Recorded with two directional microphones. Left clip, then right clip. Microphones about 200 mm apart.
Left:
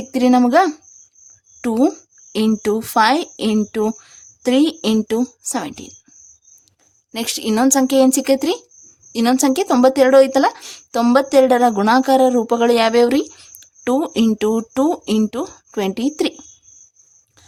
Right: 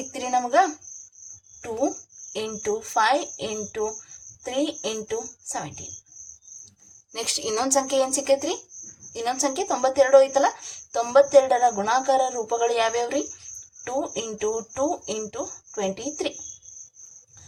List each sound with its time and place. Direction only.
0.1 s speech: 50° left (ahead or behind)
7.1 s speech: 45° left (ahead or behind)